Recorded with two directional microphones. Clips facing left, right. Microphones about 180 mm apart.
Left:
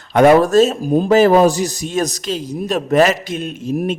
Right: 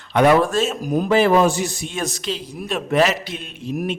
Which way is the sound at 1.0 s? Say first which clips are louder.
Left 4 dB; 40° left (ahead or behind).